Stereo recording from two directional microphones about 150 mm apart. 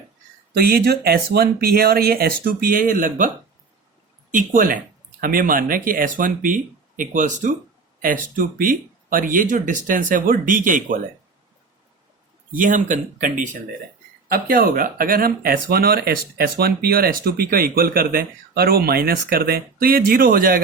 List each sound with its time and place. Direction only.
0.5 s speech: 90° right; by 3.2 s 65° right (ahead or behind)
4.3 s speech: 60° right (ahead or behind)
12.5 s speech: 65° right (ahead or behind)
14.3 s speech: 75° right (ahead or behind)